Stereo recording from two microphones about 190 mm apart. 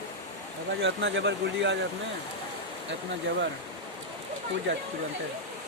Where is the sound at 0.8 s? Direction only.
70° right (ahead or behind).